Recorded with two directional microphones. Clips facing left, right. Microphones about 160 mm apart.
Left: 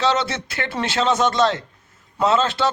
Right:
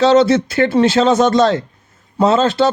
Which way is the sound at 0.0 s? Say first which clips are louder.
Right 11 dB; 35° right (ahead or behind).